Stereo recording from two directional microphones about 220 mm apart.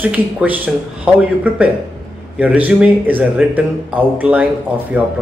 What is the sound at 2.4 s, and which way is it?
Speech, 5° right (ahead or behind).